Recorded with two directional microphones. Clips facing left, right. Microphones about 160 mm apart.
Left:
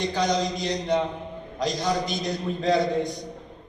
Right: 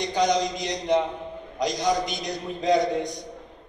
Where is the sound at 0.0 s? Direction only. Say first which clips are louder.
Right 1 dB; 15° right (ahead or behind).